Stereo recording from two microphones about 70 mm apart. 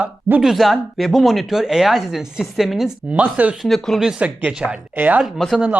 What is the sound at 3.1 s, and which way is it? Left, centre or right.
Speech, right.